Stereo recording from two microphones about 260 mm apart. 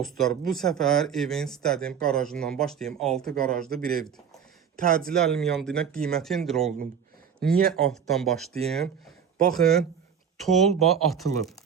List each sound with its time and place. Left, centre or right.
0.0 s speech: centre
4.8 s speech: right
5.1 s speech: centre
7.3 s speech: right
7.7 s speech: centre